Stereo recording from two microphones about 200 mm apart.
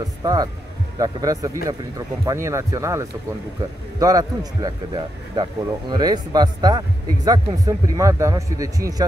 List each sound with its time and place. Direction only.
0.2 s speech: 20° right (ahead or behind)